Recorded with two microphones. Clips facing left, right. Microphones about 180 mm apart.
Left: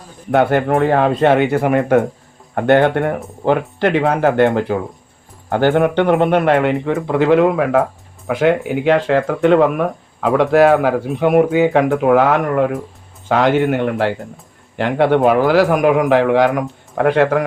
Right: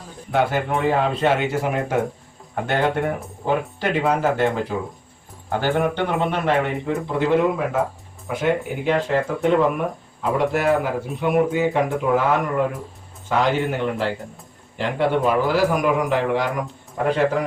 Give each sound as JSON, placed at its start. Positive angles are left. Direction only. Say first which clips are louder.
{"t": 0.3, "sound": "a man's voice", "louder": "left 7 dB", "side_deg": 60}
{"t": 13.2, "sound": "a man's voice", "louder": "left 6 dB", "side_deg": 65}